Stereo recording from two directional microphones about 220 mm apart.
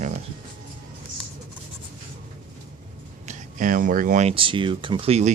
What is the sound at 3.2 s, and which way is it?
Speech, 35° right (ahead or behind).